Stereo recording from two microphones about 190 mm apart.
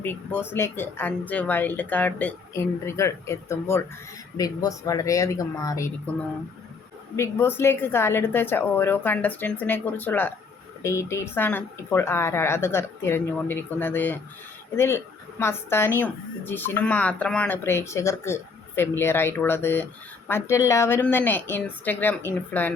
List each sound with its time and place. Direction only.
0.0 s speech: 10° left (ahead or behind)